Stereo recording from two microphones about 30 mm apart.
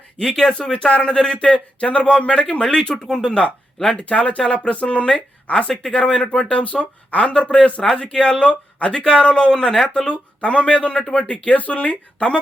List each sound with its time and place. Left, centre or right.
0.2 s speech: left
3.9 s speech: left
6.5 s speech: left
7.9 s speech: left
10.1 s speech: left